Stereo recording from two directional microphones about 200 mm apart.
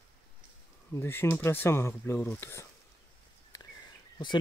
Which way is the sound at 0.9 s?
10° left (ahead or behind).